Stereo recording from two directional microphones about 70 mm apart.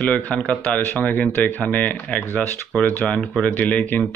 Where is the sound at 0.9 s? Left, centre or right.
Left.